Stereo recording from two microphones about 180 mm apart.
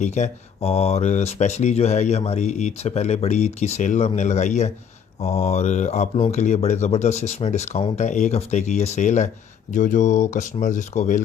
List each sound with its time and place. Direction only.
0.0 s speech: 40° left (ahead or behind)